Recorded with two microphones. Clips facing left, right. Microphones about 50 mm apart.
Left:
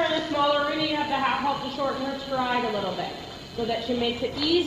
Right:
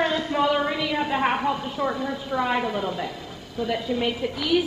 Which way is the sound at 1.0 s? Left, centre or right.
Right.